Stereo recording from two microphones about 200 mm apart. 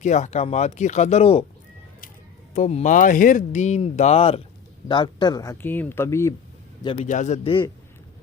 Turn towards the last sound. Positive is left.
turn(degrees=35)  # may be behind; listen again after turning